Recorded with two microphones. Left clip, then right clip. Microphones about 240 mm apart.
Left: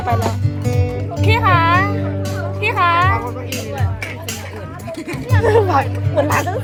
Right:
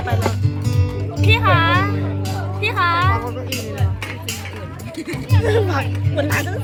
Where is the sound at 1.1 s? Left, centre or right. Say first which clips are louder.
Left 1 dB; centre.